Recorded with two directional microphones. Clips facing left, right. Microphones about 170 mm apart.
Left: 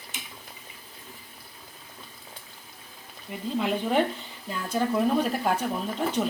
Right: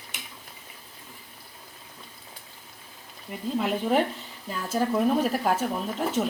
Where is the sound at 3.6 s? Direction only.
Centre (ahead or behind).